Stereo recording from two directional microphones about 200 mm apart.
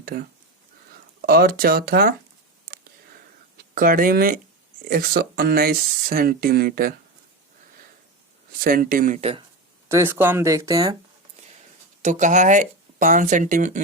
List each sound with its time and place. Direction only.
0.0 s speech: 50° right (ahead or behind)
1.3 s speech: 50° right (ahead or behind)
2.6 s a sound: 50° right (ahead or behind)
3.8 s speech: 45° right (ahead or behind)
8.6 s speech: 45° right (ahead or behind)
9.9 s speech: 10° right (ahead or behind)
12.0 s speech: 40° right (ahead or behind)